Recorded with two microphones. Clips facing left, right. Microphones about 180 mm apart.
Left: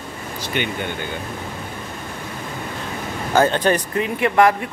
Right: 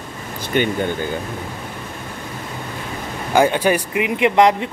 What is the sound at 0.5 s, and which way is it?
Speech, 45° right (ahead or behind).